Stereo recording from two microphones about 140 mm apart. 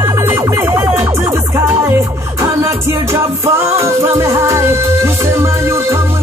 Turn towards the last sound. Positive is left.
turn(degrees=-20)  # may be behind; listen again after turning